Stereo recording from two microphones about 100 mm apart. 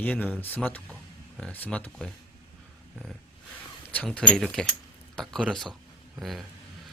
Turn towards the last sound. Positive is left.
turn(degrees=0)  # may be behind; listen again after turning